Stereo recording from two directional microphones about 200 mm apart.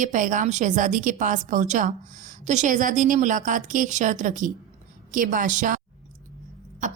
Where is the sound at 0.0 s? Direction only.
40° right (ahead or behind).